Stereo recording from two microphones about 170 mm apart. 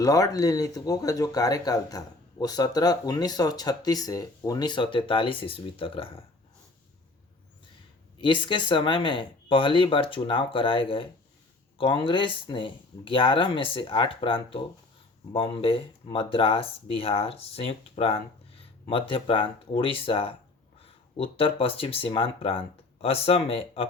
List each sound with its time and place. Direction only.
0.0 s speech: 20° left (ahead or behind)
8.2 s speech: 30° left (ahead or behind)